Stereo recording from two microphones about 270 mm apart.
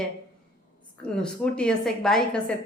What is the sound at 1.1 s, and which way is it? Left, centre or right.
A woman's voice, centre.